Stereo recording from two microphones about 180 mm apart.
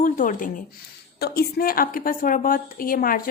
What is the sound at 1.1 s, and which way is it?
A woman's voice, 60° left (ahead or behind).